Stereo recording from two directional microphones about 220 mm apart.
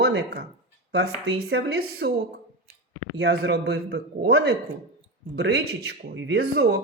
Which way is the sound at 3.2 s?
50° right (ahead or behind).